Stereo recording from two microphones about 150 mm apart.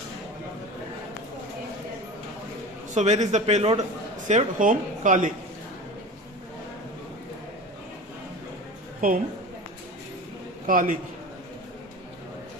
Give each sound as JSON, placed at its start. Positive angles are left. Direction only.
{"t": 2.9, "sound": "a man's voice", "side_deg": -50}
{"t": 4.3, "sound": "speech", "side_deg": -55}
{"t": 9.0, "sound": "a woman's voice", "side_deg": -65}
{"t": 10.7, "sound": "a man's voice", "side_deg": -70}